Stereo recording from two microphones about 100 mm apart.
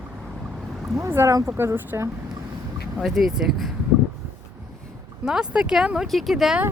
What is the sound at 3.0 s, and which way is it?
Speech, centre (ahead or behind).